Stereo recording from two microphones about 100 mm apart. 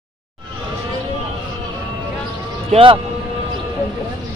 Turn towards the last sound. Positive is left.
turn(degrees=-60)  # may be behind; listen again after turning